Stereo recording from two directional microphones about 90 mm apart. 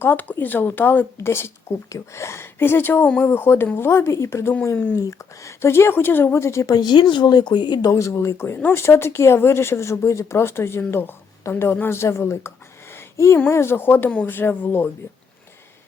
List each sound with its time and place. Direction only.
0.0 s speech: 25° left (ahead or behind)
6.3 s a woman's voice: 35° left (ahead or behind)
6.7 s speech: 55° left (ahead or behind); by 12.5 s 30° left (ahead or behind)
12.9 s a sound: 30° left (ahead or behind)
13.5 s speech: 30° left (ahead or behind)